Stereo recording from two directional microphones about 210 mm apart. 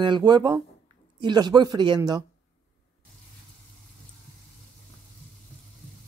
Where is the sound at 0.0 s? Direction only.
20° right (ahead or behind).